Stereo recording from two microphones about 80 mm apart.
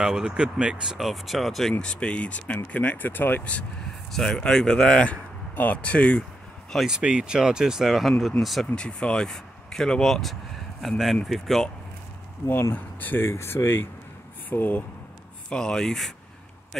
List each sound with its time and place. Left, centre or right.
0.0 s speech: centre
4.1 s speech: centre
6.9 s speech: centre
8.7 s speech: centre
12.4 s speech: left
12.7 s speech: left
15.5 s speech: centre